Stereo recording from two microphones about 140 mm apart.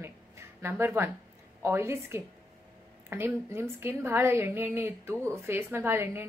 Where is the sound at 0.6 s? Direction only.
15° right (ahead or behind).